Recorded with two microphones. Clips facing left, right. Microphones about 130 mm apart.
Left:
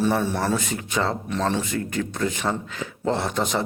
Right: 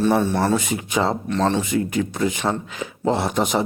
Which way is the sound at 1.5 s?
10° right (ahead or behind).